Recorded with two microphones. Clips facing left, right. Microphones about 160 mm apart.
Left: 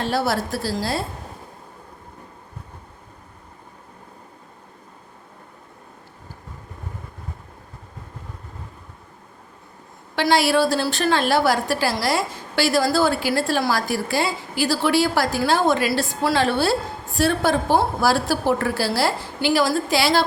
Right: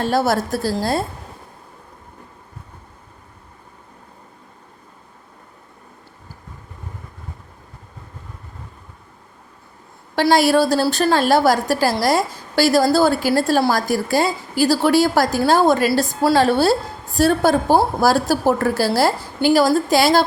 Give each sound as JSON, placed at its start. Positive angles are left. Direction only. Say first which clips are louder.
{"t": 0.0, "sound": "a woman's voice", "louder": "right 4 dB", "side_deg": -45}
{"t": 10.2, "sound": "a woman's voice", "louder": "right 3 dB", "side_deg": -45}